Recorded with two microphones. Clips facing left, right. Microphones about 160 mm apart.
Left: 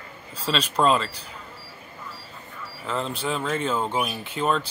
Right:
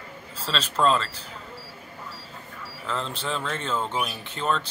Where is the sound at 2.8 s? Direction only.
10° left (ahead or behind).